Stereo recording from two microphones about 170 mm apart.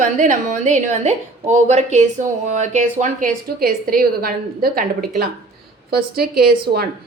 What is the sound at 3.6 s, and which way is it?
A woman's voice, 60° right (ahead or behind).